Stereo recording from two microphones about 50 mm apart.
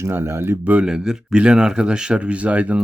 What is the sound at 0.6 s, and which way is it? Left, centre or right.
Speech, right.